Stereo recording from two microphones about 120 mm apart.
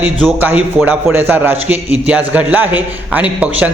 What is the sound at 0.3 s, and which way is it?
A man's voice, 15° right (ahead or behind).